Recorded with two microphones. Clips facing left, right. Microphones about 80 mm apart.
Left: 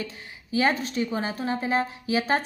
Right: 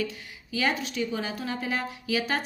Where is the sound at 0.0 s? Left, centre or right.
Left.